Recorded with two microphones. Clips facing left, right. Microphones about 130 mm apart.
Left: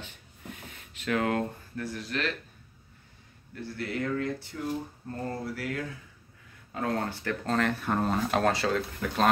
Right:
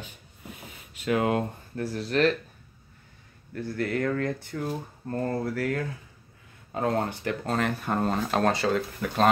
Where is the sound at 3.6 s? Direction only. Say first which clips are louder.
Right 5 dB; 45° right (ahead or behind).